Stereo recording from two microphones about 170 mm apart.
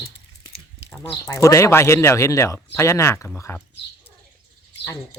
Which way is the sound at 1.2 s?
15° left (ahead or behind).